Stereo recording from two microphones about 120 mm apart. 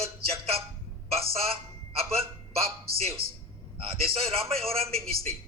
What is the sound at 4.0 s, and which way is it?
A man's voice, 55° right (ahead or behind).